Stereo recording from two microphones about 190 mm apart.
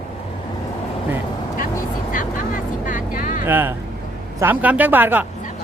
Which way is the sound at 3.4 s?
10° right (ahead or behind).